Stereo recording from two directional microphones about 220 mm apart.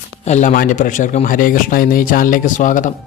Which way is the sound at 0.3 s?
35° left (ahead or behind).